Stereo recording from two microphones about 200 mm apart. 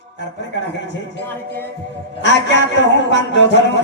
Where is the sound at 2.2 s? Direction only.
60° left (ahead or behind).